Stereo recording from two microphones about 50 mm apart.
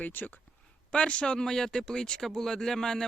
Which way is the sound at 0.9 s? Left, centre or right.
Left.